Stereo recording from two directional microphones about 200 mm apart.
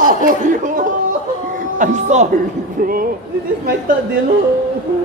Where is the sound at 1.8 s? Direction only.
40° right (ahead or behind).